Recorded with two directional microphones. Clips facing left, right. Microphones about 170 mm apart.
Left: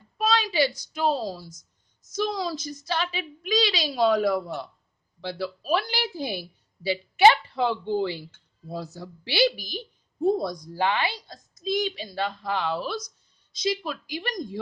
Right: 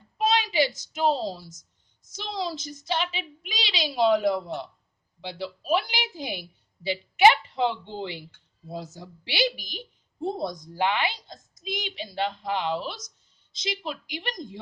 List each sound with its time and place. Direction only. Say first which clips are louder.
0.2 s a child's voice: even; 20° right (ahead or behind)